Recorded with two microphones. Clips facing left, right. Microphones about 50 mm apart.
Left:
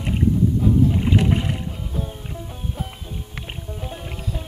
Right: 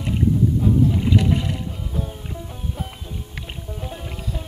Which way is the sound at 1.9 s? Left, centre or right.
Centre.